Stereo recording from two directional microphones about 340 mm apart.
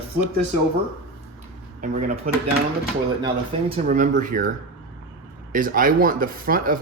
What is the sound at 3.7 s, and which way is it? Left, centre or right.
Speech, right.